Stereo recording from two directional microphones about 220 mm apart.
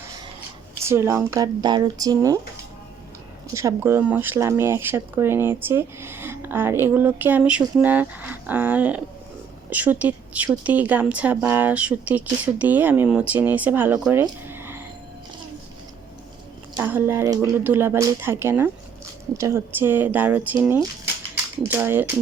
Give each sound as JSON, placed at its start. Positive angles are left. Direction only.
{"t": 0.8, "sound": "speech", "side_deg": -10}
{"t": 3.5, "sound": "speech", "side_deg": -15}
{"t": 16.7, "sound": "speech", "side_deg": -10}